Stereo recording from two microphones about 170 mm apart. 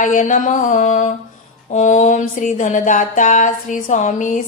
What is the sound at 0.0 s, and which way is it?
Music, 50° left (ahead or behind).